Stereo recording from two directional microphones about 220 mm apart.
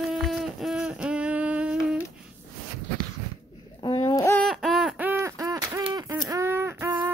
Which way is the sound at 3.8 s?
20° left (ahead or behind).